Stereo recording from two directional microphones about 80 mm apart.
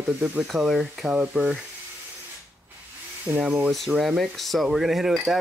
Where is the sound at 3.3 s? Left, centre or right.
Right.